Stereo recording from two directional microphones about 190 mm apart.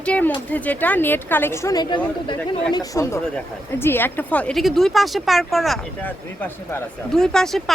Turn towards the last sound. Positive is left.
turn(degrees=0)  # may be behind; listen again after turning